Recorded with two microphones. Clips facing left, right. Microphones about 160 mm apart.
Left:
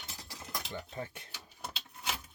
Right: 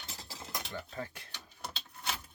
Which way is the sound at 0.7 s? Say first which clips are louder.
Left 1 dB; 25° left (ahead or behind).